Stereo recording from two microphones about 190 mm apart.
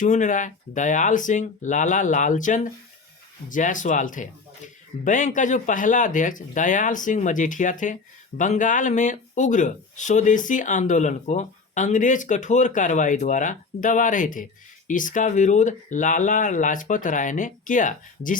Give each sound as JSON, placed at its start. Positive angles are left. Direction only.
{"t": 0.0, "sound": "speech", "side_deg": 40}